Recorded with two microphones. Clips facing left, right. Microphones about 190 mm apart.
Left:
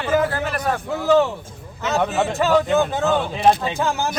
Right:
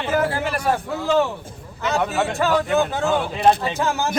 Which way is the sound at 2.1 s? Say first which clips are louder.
Left 3 dB; 20° left (ahead or behind).